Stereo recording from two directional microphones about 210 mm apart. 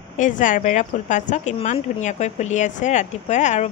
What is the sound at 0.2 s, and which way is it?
A woman's voice, 40° left (ahead or behind).